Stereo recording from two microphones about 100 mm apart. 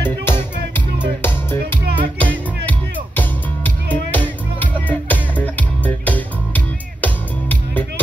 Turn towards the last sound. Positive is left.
turn(degrees=15)  # may be behind; listen again after turning